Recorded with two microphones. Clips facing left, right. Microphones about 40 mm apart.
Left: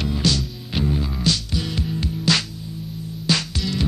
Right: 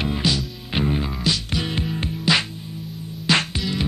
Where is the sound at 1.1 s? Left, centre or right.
Centre.